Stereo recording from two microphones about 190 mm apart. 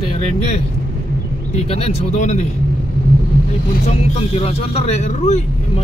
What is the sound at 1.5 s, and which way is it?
Speech, 35° left (ahead or behind).